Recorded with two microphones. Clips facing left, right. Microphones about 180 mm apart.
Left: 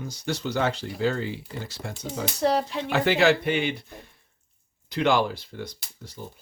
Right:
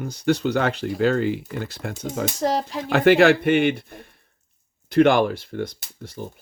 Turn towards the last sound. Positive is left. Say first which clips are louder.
# right 6 dB
turn(degrees=-50)  # may be behind; listen again after turning